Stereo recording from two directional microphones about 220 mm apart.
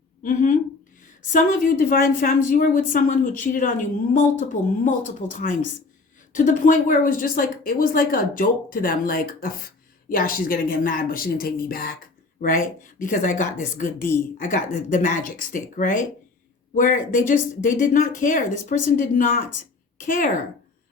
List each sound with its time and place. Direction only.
0.2 s a woman's voice: 35° left (ahead or behind)